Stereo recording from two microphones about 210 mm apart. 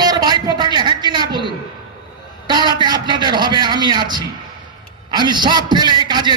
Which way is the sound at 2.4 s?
20° right (ahead or behind).